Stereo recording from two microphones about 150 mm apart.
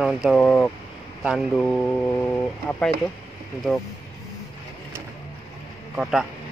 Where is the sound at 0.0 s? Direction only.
Centre (ahead or behind).